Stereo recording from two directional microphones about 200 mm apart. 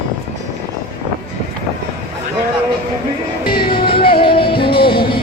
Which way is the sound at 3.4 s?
50° left (ahead or behind).